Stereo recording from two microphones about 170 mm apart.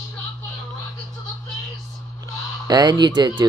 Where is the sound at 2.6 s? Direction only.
25° right (ahead or behind).